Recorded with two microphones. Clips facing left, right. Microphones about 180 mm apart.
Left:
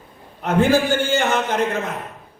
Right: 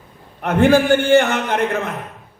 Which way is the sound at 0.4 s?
60° right (ahead or behind).